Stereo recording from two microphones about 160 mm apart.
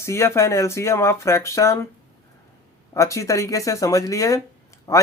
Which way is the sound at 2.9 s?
20° left (ahead or behind).